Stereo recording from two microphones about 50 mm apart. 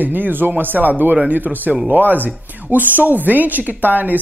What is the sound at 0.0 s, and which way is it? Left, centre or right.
Speech, right.